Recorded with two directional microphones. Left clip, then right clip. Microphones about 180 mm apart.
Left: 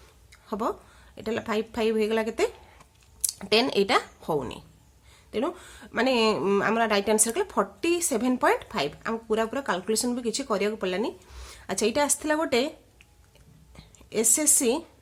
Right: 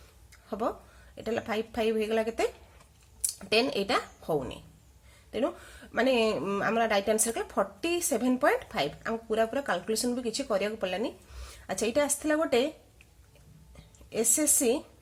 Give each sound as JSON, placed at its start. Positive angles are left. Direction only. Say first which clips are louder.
{"t": 0.4, "sound": "speech", "louder": "left 3 dB", "side_deg": 25}
{"t": 14.1, "sound": "a woman's voice", "louder": "left 3 dB", "side_deg": 30}